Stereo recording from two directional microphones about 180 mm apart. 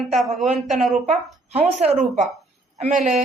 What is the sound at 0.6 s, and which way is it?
Speech, centre (ahead or behind).